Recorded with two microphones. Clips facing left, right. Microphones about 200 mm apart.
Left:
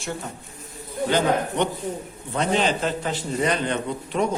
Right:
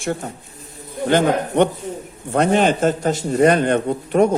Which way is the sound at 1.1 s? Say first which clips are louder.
Right 5 dB; 55° right (ahead or behind).